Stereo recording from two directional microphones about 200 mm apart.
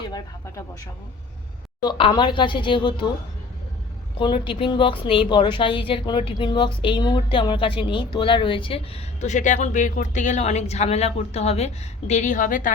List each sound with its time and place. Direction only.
0.1 s a sound: 20° left (ahead or behind)
1.8 s speech: 25° left (ahead or behind)
4.2 s speech: 25° left (ahead or behind)
9.2 s speech: 40° left (ahead or behind)